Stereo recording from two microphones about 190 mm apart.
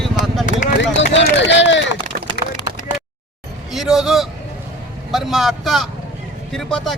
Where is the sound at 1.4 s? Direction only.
70° left (ahead or behind).